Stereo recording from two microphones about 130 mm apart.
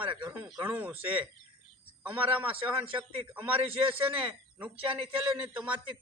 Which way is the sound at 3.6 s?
50° right (ahead or behind).